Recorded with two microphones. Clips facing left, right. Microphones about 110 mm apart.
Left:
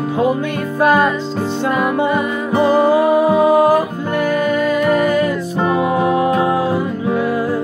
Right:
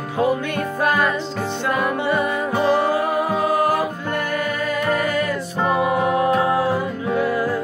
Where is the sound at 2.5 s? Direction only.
20° left (ahead or behind).